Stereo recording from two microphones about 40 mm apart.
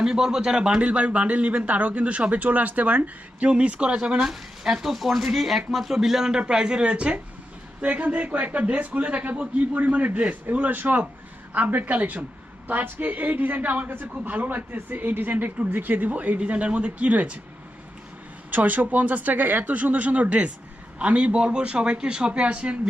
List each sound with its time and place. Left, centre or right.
0.0 s speech: centre
0.8 s a man's voice: right
3.5 s speech: right
4.3 s speech: centre; by 7.2 s right
7.8 s a man's voice: right
10.5 s a man's voice: right
16.4 s a man's voice: right
18.5 s a man's voice: right